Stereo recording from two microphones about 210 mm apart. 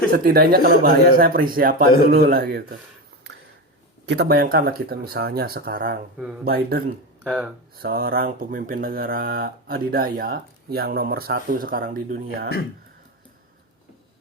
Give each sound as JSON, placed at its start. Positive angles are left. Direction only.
{"t": 0.1, "sound": "speech", "side_deg": -45}
{"t": 4.0, "sound": "speech", "side_deg": -50}